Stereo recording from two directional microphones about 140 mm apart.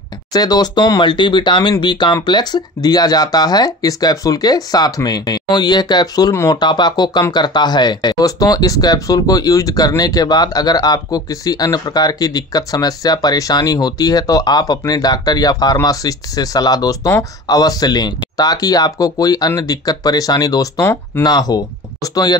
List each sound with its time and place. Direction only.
0.3 s speech: 30° left (ahead or behind)